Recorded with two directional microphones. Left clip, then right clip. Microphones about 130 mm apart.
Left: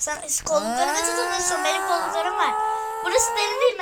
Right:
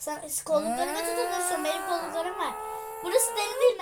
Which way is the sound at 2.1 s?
30° right (ahead or behind).